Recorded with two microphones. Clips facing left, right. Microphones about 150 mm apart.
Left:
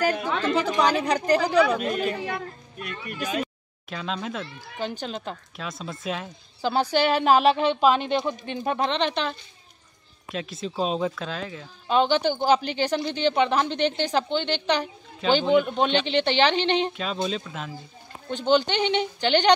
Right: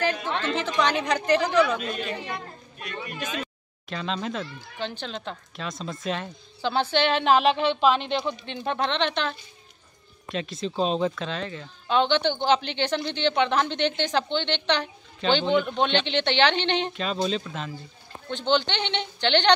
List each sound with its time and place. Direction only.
0.0 s a woman's voice: 45° left (ahead or behind)
1.8 s speech: 50° left (ahead or behind)
3.9 s speech: centre (ahead or behind)
10.3 s speech: centre (ahead or behind)